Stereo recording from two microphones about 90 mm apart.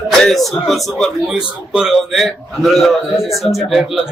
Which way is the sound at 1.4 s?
10° right (ahead or behind).